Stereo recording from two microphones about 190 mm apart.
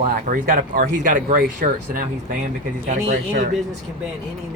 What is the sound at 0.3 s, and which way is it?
Speech, 50° right (ahead or behind).